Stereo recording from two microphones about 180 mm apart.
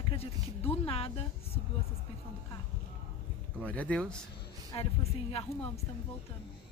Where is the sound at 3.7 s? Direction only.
5° left (ahead or behind).